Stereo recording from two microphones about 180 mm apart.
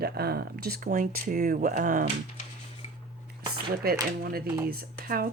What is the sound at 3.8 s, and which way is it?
Speech, 60° right (ahead or behind).